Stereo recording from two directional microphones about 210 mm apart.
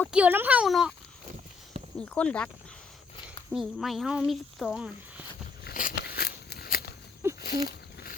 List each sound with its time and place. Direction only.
0.1 s speech: 5° right (ahead or behind)
2.0 s speech: 5° left (ahead or behind)
3.5 s speech: centre (ahead or behind)
5.6 s biting: 45° left (ahead or behind)
7.4 s a sound: 45° left (ahead or behind)